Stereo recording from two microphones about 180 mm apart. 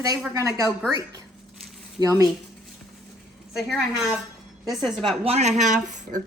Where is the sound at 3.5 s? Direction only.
Centre (ahead or behind).